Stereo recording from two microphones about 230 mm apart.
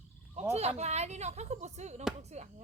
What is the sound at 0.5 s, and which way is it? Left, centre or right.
Speech, right.